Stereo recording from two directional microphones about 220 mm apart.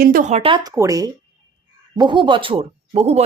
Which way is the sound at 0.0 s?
40° right (ahead or behind).